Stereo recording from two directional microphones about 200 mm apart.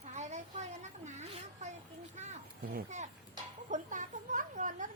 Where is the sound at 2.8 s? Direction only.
35° right (ahead or behind).